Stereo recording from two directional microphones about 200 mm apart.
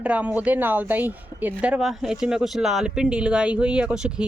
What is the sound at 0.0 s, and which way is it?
Speech, 5° right (ahead or behind).